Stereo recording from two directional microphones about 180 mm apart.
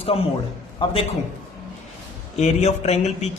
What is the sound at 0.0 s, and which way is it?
Speech, 30° left (ahead or behind).